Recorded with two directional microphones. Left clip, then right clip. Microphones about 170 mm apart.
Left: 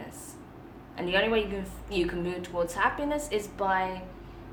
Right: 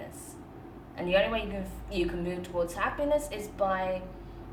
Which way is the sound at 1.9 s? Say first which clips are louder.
Left 2 dB; 25° left (ahead or behind).